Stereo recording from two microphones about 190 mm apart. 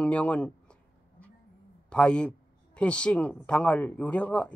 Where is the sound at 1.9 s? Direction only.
5° left (ahead or behind).